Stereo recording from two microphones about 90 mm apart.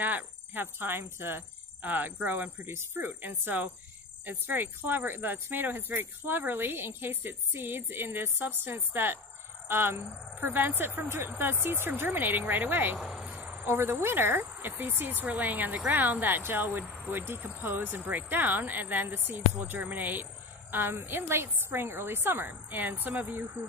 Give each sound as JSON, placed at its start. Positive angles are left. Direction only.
{"t": 0.0, "sound": "speech", "side_deg": -20}
{"t": 13.2, "sound": "insect", "side_deg": -15}
{"t": 13.7, "sound": "speech", "side_deg": -25}